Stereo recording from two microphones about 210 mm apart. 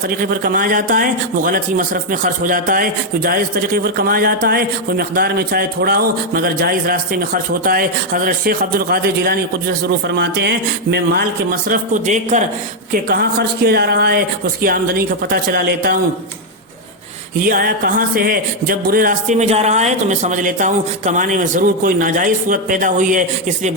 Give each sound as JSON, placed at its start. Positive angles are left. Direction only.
{"t": 0.2, "sound": "a man's voice", "side_deg": -45}
{"t": 12.9, "sound": "a man's voice", "side_deg": -45}
{"t": 17.4, "sound": "a man's voice", "side_deg": -45}